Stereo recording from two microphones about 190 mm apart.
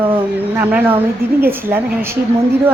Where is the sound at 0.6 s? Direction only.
10° right (ahead or behind).